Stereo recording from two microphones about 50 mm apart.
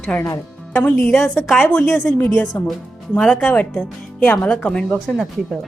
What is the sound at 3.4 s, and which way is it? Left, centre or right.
Speech, left.